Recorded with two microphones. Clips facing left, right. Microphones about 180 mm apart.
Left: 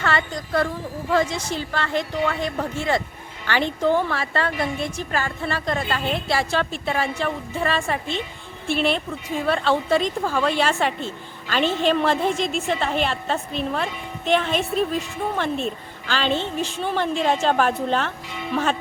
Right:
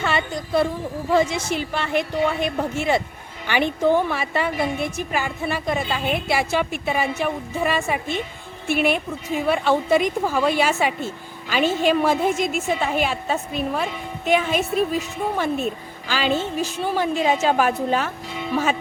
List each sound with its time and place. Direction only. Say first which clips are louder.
0.0 s a woman's voice: right 1 dB; 15° right (ahead or behind)